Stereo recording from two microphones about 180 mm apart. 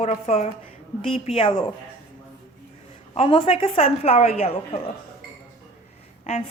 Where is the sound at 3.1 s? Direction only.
30° left (ahead or behind).